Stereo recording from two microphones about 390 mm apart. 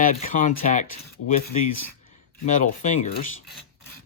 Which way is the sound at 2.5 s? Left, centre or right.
Centre.